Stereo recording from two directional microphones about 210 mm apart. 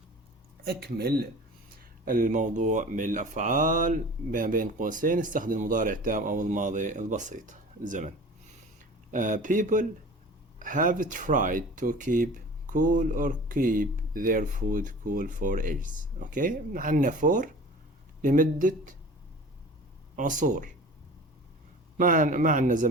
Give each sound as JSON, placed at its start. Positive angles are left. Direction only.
{"t": 0.6, "sound": "speech", "side_deg": -50}
{"t": 9.1, "sound": "speech", "side_deg": -40}
{"t": 20.1, "sound": "speech", "side_deg": -40}
{"t": 21.9, "sound": "speech", "side_deg": -40}